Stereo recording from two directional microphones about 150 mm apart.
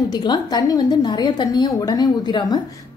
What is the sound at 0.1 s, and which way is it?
A woman's voice, 30° left (ahead or behind).